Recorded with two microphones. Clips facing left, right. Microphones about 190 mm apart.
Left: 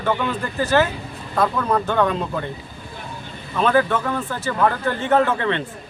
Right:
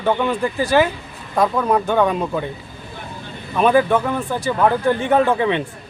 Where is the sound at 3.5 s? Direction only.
15° right (ahead or behind).